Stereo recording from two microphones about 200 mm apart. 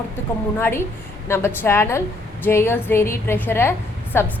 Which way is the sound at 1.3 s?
10° left (ahead or behind).